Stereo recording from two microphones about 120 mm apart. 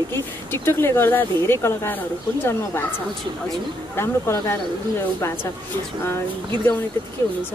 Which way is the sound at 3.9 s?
20° left (ahead or behind).